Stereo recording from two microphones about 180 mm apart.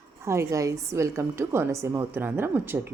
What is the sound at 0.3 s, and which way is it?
A woman's voice, 15° right (ahead or behind).